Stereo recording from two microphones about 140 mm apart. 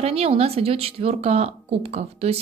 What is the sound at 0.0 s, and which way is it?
Speech, 45° right (ahead or behind).